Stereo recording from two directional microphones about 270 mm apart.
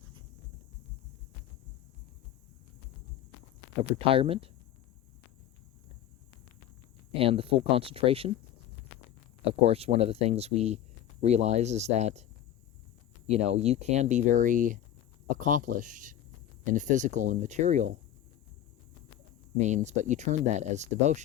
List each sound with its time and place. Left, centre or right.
4.1 s speech: right
7.1 s speech: right
9.5 s speech: right
13.2 s speech: right
19.5 s speech: right